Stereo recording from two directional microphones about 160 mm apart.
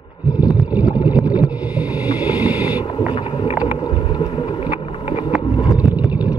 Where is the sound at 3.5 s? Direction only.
10° right (ahead or behind).